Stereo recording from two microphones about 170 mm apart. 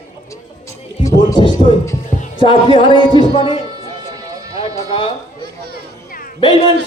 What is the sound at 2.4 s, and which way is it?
A man's voice, 30° left (ahead or behind).